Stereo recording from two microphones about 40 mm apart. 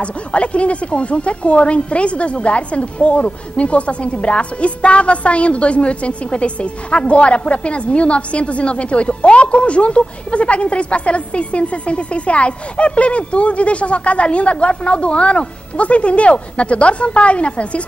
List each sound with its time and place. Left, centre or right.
0.0 s speech: left